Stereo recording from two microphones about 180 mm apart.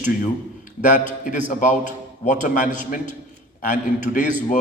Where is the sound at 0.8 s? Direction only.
45° left (ahead or behind).